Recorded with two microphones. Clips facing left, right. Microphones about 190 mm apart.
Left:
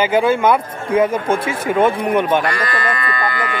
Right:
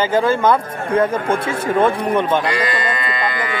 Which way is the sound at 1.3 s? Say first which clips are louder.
Even; 30° right (ahead or behind).